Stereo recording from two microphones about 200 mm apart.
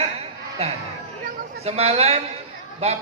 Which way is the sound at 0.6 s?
30° right (ahead or behind).